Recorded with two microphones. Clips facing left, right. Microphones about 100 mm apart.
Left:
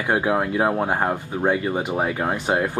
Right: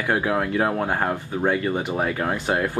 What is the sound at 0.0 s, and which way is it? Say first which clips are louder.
Speech: left 2 dB; 20° left (ahead or behind).